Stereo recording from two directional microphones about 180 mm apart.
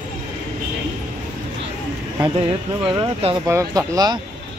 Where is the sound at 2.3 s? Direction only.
30° right (ahead or behind).